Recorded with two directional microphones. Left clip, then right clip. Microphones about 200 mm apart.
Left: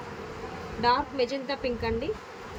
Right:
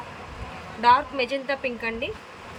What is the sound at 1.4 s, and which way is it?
Speech, 10° right (ahead or behind).